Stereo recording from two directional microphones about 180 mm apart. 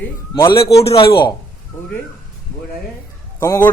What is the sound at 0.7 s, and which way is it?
Speech, 35° left (ahead or behind).